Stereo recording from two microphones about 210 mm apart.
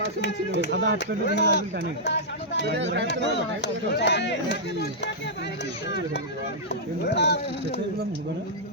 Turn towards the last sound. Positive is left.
turn(degrees=55)  # may be behind; listen again after turning